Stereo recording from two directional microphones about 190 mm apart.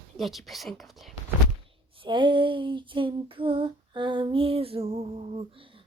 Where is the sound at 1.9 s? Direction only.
25° right (ahead or behind).